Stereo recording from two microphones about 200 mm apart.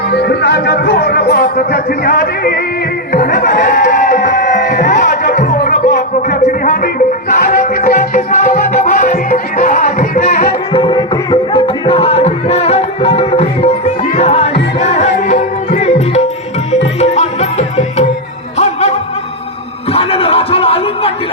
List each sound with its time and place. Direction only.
0.1 s speech: 55° left (ahead or behind)
3.1 s crowd: 40° left (ahead or behind)
5.5 s music: 45° left (ahead or behind)
10.7 s music: 25° left (ahead or behind)
19.9 s a sound: 30° left (ahead or behind)